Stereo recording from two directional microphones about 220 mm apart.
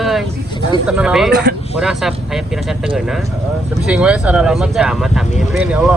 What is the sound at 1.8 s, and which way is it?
Speech, centre (ahead or behind).